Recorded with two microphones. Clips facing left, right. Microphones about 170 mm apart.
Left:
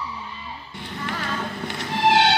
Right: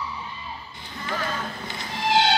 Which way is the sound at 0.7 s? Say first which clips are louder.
Left 1 dB; 70° left (ahead or behind).